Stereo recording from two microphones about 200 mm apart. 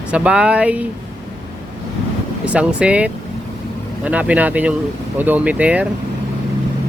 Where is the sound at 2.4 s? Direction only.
5° right (ahead or behind).